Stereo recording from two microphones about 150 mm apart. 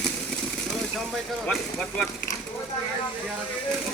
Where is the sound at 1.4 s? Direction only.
10° left (ahead or behind).